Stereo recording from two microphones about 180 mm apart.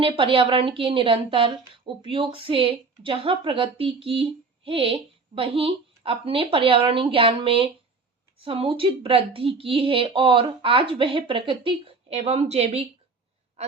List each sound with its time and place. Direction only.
0.0 s a woman's voice: 30° right (ahead or behind)